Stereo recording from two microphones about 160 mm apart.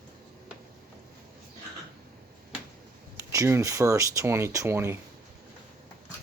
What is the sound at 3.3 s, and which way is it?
Speech, 20° right (ahead or behind).